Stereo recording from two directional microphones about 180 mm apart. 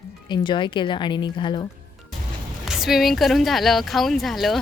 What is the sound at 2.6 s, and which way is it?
Speech, centre (ahead or behind).